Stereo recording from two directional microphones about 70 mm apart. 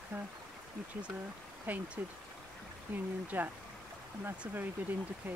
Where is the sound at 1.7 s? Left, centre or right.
Right.